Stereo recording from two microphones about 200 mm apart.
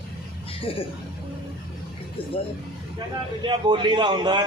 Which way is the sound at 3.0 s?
20° right (ahead or behind).